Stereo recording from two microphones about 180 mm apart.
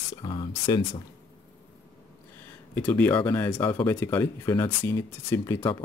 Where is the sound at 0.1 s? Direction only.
25° left (ahead or behind).